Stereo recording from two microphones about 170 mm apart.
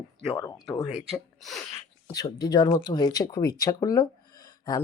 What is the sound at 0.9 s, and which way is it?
Speech, 5° right (ahead or behind).